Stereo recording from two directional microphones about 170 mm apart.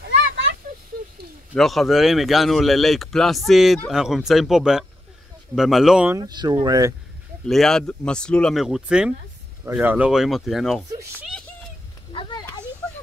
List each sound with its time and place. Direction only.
1.5 s speech: centre (ahead or behind)
6.1 s speech: 25° right (ahead or behind)
7.4 s speech: centre (ahead or behind)
12.1 s a sound: 30° left (ahead or behind)